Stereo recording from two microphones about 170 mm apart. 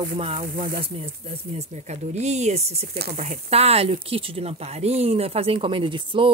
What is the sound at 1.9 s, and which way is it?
Speech, 40° right (ahead or behind).